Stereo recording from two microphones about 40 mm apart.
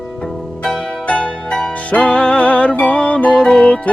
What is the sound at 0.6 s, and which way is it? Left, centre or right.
Zither, centre.